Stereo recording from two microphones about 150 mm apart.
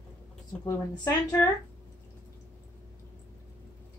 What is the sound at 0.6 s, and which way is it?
Speech, 30° left (ahead or behind).